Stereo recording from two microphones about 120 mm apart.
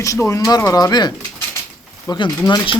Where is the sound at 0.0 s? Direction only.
25° left (ahead or behind).